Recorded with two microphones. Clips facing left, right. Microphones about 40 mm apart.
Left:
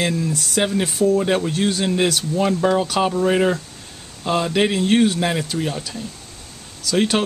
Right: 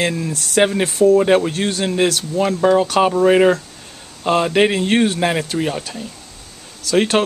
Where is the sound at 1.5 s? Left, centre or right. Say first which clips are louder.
Even; centre.